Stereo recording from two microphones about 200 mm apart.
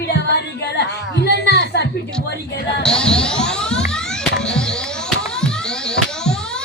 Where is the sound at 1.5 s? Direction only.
55° left (ahead or behind).